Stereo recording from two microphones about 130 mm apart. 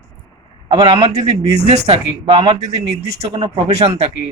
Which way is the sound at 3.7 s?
55° right (ahead or behind).